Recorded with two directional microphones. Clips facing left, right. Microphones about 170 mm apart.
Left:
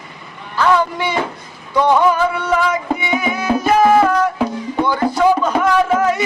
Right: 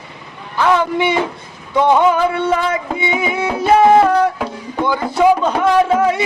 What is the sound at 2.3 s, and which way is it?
Music, 25° right (ahead or behind).